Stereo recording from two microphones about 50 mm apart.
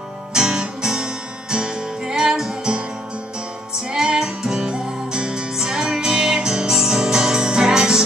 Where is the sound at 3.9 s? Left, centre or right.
Centre.